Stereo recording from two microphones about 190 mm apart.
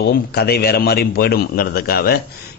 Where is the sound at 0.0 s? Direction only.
55° left (ahead or behind).